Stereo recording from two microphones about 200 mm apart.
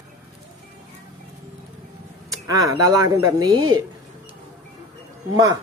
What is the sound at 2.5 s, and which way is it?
Speech, 15° right (ahead or behind).